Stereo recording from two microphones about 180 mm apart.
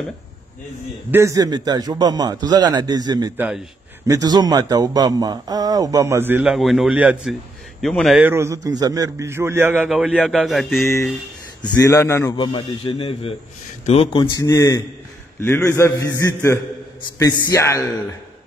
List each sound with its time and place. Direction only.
1.1 s speech: 15° right (ahead or behind)
3.3 s a man's voice: 5° right (ahead or behind)
4.1 s speech: 20° right (ahead or behind); by 8.3 s centre (ahead or behind)
8.3 s a man's voice: 15° right (ahead or behind); by 10.8 s centre (ahead or behind)
11.6 s a man's voice: 15° left (ahead or behind)
12.4 s a man's voice: 25° left (ahead or behind)